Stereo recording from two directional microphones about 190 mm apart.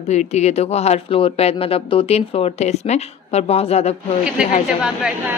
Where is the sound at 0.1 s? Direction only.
35° left (ahead or behind).